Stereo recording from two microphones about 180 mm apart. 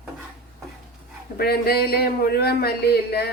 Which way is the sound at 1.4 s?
60° left (ahead or behind).